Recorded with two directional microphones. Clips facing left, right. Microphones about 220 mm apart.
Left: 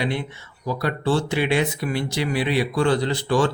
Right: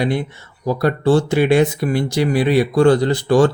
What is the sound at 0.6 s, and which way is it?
Speech, 45° right (ahead or behind).